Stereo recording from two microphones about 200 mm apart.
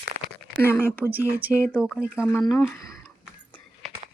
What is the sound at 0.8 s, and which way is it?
Speech, 10° right (ahead or behind).